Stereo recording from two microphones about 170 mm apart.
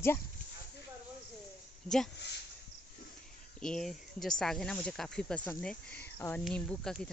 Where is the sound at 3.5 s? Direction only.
5° left (ahead or behind).